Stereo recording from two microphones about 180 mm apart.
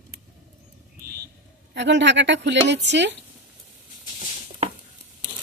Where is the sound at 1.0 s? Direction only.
60° right (ahead or behind).